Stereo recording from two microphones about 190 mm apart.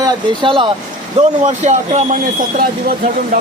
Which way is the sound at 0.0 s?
25° right (ahead or behind).